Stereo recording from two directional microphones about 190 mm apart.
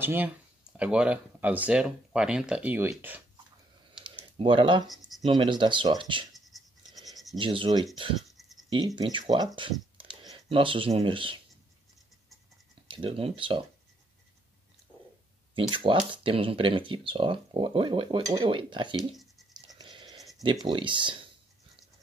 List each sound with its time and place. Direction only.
0.0 s speech: 10° right (ahead or behind)
4.4 s speech: 25° right (ahead or behind)
4.8 s speech: centre (ahead or behind)
5.2 s speech: 25° right (ahead or behind)
6.4 s a sound: centre (ahead or behind)
7.3 s speech: 25° right (ahead or behind)
8.2 s a sound: centre (ahead or behind)
8.6 s speech: 25° right (ahead or behind)
12.8 s speech: 25° right (ahead or behind)
15.7 s speech: 25° right (ahead or behind)
18.9 s a sound: centre (ahead or behind)
19.8 s a sound: 25° right (ahead or behind)
20.6 s speech: 25° right (ahead or behind)